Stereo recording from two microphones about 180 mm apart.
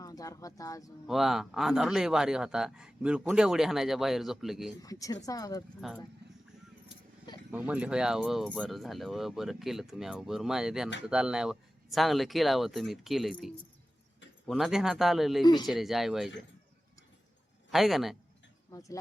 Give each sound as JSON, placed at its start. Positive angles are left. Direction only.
{"t": 0.0, "sound": "speech", "side_deg": 20}
{"t": 1.0, "sound": "speech", "side_deg": 0}
{"t": 4.8, "sound": "speech", "side_deg": 20}
{"t": 5.8, "sound": "speech", "side_deg": 0}
{"t": 7.7, "sound": "speech", "side_deg": -5}
{"t": 17.7, "sound": "speech", "side_deg": 0}
{"t": 18.7, "sound": "speech", "side_deg": 20}